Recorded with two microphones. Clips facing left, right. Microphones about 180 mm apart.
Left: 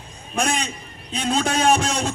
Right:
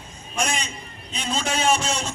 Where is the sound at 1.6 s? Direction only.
55° left (ahead or behind).